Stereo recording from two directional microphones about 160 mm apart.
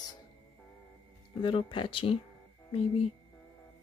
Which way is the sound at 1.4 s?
30° left (ahead or behind).